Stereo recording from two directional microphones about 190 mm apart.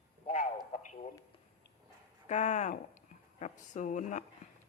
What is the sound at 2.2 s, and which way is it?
Speech, 40° left (ahead or behind).